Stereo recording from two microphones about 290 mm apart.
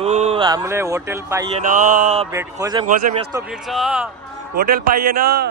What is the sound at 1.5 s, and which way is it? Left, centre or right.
Mantra, right.